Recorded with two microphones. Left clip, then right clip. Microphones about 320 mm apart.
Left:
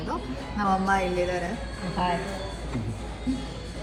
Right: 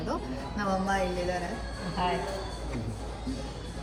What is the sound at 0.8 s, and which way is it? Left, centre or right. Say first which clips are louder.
Speech: left 5 dB; left.